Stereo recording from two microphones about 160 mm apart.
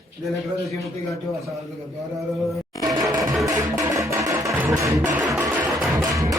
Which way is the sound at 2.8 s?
20° right (ahead or behind).